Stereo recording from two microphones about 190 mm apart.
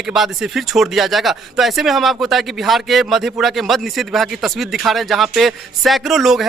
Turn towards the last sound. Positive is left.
turn(degrees=0)  # may be behind; listen again after turning